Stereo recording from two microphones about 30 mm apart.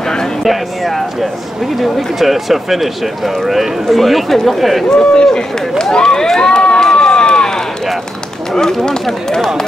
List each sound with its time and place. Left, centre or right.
0.4 s speech: centre
4.0 s speech: centre
4.8 s speech: left
6.5 s crowd: left
6.9 s run: left
8.5 s speech: centre